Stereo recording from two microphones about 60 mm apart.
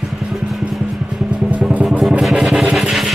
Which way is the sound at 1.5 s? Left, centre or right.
Right.